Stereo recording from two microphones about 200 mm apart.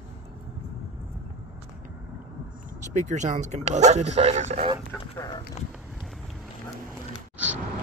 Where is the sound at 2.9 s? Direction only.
35° right (ahead or behind).